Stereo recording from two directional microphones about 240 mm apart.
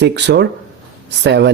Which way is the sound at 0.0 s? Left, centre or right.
Right.